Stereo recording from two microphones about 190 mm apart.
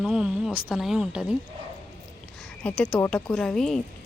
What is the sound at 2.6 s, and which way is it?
A woman's voice, 5° left (ahead or behind).